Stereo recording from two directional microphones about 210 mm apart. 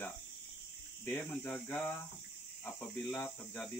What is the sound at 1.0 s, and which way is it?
Speech, 5° left (ahead or behind).